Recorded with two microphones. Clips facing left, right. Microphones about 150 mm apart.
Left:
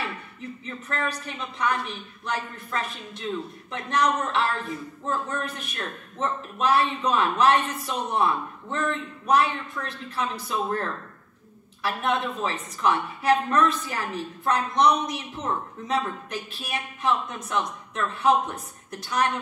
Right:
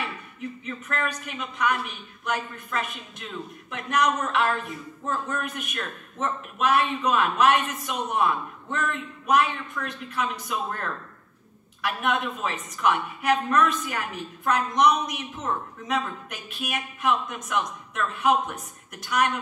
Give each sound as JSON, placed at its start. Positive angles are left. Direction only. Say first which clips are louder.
{"t": 0.7, "sound": "speech", "louder": "left 1 dB", "side_deg": 30}